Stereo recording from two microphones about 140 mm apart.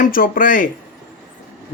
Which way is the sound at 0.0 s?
80° left.